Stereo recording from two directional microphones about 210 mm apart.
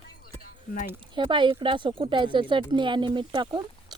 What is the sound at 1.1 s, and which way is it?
Speech, 20° right (ahead or behind).